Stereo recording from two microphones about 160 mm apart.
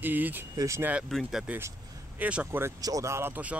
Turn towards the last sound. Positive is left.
turn(degrees=-10)  # may be behind; listen again after turning